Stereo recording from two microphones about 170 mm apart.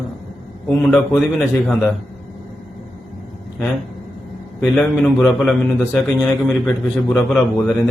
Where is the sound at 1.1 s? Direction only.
5° left (ahead or behind).